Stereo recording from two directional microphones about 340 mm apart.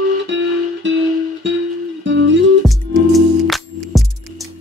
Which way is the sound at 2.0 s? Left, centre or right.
Right.